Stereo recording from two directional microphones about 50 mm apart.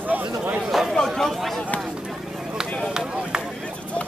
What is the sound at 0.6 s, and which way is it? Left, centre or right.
Chatter, centre.